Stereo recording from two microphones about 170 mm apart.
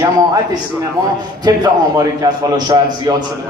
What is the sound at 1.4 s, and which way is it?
A man's voice, 20° right (ahead or behind).